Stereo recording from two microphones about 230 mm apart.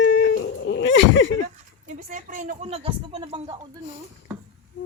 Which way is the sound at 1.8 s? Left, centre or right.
Right.